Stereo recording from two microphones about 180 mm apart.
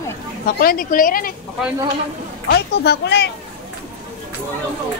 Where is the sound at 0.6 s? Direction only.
50° left (ahead or behind).